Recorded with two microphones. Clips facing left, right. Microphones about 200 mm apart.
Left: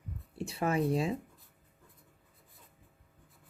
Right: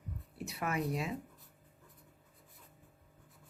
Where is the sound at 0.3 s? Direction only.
30° left (ahead or behind).